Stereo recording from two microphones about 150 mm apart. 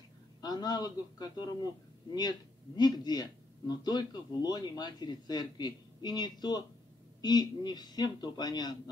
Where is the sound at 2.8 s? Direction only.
25° left (ahead or behind).